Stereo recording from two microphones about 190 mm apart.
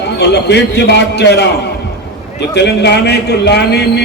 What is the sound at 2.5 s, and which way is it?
A man's voice, 60° left (ahead or behind).